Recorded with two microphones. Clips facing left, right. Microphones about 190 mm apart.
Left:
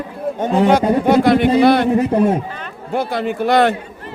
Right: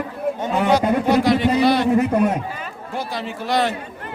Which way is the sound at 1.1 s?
55° left (ahead or behind).